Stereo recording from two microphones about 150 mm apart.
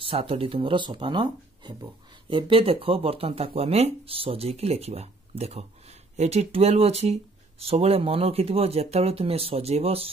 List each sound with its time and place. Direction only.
0.0 s speech: 40° right (ahead or behind)